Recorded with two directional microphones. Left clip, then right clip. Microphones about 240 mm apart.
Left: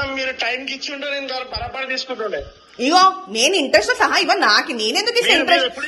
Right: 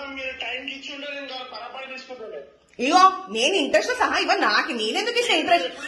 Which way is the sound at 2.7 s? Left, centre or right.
Centre.